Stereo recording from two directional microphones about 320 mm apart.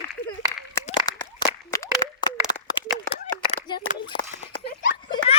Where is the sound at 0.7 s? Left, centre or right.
Centre.